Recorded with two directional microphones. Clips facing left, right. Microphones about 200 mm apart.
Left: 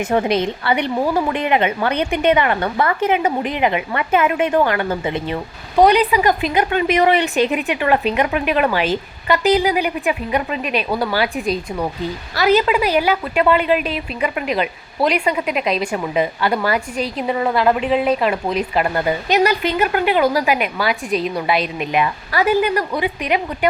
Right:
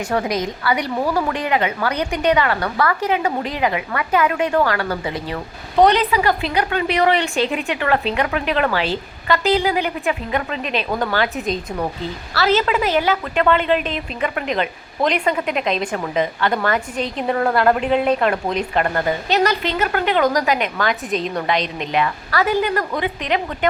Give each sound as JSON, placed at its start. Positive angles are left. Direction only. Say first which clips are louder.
{"t": 0.0, "sound": "a woman's voice", "louder": "left 4 dB", "side_deg": 25}
{"t": 5.7, "sound": "a woman's voice", "louder": "left 2 dB", "side_deg": 10}